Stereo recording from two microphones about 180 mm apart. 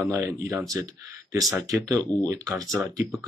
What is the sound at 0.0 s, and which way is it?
Speech, 15° right (ahead or behind).